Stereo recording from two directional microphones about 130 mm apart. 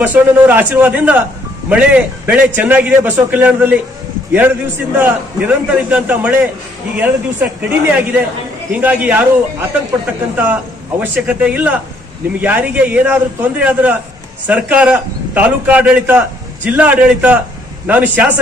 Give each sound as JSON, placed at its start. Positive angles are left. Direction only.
{"t": 0.0, "sound": "a man's voice", "side_deg": -15}
{"t": 4.9, "sound": "a man's voice", "side_deg": -10}